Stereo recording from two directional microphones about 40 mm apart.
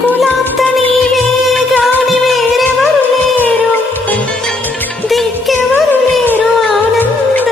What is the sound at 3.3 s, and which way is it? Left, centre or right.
Music, left.